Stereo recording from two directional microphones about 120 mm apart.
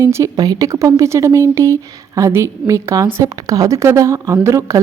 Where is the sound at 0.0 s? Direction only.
25° right (ahead or behind).